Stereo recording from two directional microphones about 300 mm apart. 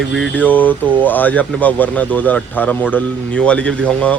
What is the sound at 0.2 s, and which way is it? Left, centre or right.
Speech, centre.